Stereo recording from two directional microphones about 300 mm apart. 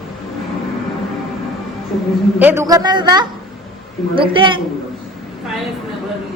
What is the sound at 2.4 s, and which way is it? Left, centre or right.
A woman's voice, centre.